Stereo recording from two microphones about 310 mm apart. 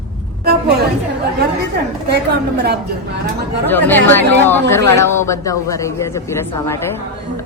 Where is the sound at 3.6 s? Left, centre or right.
Centre.